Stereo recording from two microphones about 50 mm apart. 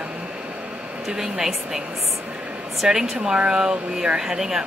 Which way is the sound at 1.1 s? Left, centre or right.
Centre.